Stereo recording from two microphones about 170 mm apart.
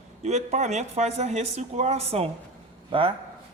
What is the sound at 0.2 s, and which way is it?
Speech, 40° right (ahead or behind).